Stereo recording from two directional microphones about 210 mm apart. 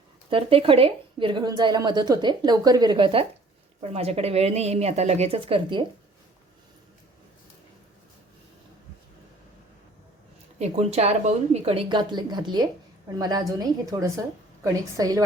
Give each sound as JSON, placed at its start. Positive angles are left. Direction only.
{"t": 0.3, "sound": "a woman's voice", "side_deg": -25}
{"t": 10.6, "sound": "a woman's voice", "side_deg": -30}
{"t": 14.6, "sound": "a woman's voice", "side_deg": -15}